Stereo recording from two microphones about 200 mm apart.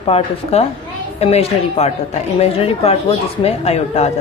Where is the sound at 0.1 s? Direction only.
30° left (ahead or behind).